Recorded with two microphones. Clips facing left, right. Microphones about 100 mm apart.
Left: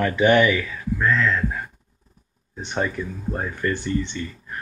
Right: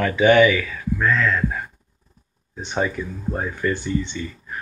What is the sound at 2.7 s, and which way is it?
Speech, 5° right (ahead or behind).